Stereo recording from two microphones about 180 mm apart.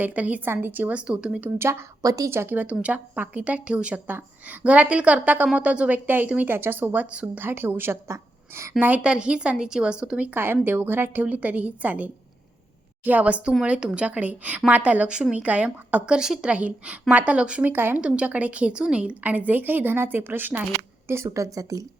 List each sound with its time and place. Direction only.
0.0 s a woman's voice: 10° right (ahead or behind)